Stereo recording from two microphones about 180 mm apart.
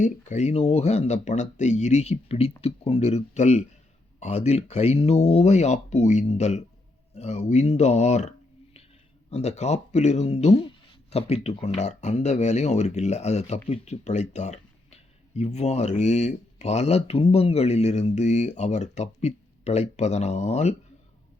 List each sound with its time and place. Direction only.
0.0 s speech: 40° left (ahead or behind)
9.3 s speech: 35° left (ahead or behind)